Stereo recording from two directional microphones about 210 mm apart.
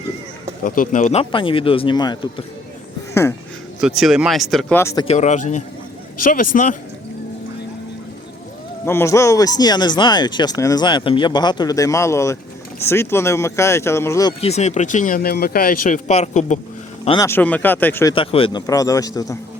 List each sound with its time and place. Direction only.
0.6 s speech: 40° left (ahead or behind); by 2.1 s 20° left (ahead or behind)
3.8 s speech: centre (ahead or behind)
4.8 s speech: 15° left (ahead or behind)
5.0 s speech: 35° left (ahead or behind)
8.8 s speech: 10° left (ahead or behind)
14.4 s speech: 30° left (ahead or behind)
17.1 s speech: 15° left (ahead or behind)
18.1 s speech: 25° left (ahead or behind)